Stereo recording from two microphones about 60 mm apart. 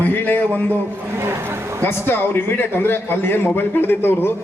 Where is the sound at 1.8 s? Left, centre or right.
Left.